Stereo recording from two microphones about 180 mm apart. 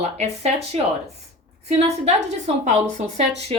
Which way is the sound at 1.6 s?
40° right (ahead or behind).